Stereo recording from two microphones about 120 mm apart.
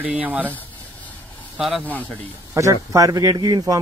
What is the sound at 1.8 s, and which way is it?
Speech, 15° left (ahead or behind).